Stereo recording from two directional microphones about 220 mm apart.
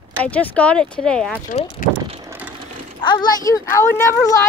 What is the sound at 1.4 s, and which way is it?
Speech, 35° left (ahead or behind).